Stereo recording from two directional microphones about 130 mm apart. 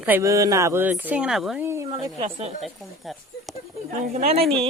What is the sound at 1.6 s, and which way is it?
Speech, 20° right (ahead or behind).